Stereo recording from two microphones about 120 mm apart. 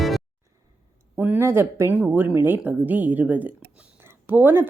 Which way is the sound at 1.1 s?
15° right (ahead or behind).